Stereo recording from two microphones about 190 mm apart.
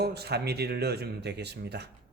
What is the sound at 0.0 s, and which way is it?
Speech, 60° right (ahead or behind).